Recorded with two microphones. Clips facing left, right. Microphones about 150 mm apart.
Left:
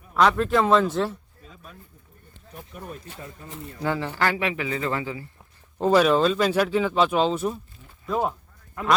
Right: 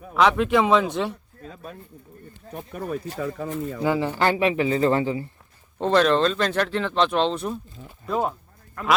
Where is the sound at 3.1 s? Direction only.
90° right.